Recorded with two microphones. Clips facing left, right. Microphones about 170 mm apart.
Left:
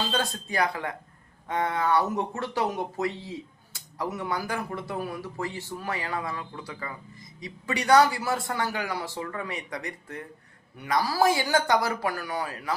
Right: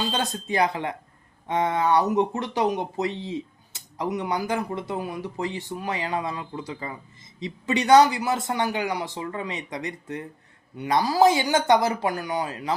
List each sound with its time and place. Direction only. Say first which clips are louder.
0.1 s speech: right 2 dB; 20° right (ahead or behind)